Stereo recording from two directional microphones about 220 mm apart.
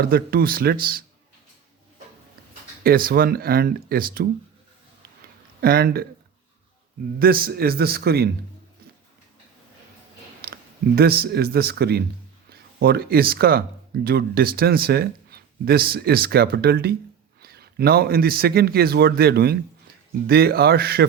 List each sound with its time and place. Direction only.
0.0 s a man's voice: 45° right (ahead or behind)
2.8 s a man's voice: 40° right (ahead or behind)
5.5 s a man's voice: 45° right (ahead or behind)
7.2 s a man's voice: 45° right (ahead or behind)
10.4 s a man's voice: 45° right (ahead or behind)